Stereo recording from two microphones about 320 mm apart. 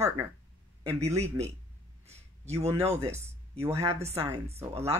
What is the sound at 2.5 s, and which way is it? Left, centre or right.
Speech, centre.